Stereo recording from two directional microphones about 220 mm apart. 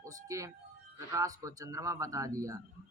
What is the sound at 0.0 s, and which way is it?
A man's voice, 15° right (ahead or behind).